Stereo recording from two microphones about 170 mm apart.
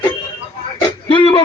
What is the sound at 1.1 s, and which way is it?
Speech, 30° left (ahead or behind).